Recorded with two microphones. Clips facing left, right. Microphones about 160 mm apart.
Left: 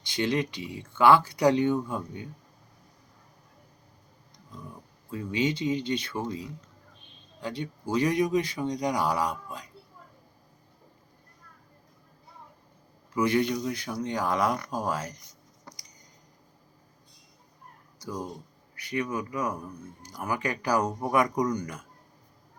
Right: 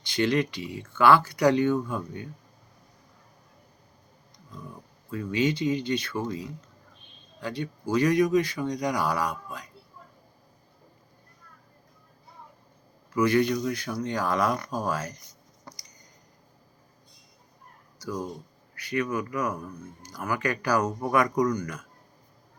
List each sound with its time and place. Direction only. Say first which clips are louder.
0.1 s speech: right 3 dB; 20° left (ahead or behind)
5.1 s speech: right 2 dB; 25° left (ahead or behind)
13.1 s speech: right 2 dB; 25° left (ahead or behind)
18.7 s speech: right 2 dB; 25° left (ahead or behind)